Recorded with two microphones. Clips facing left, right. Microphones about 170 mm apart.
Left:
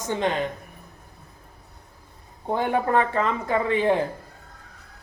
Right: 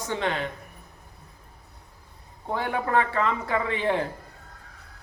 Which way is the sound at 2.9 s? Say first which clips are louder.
Left 2 dB; 20° left (ahead or behind).